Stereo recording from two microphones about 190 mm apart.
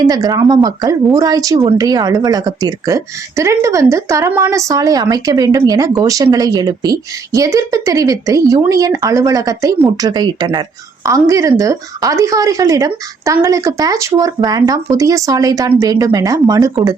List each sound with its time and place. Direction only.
0.1 s a woman's voice: 20° right (ahead or behind)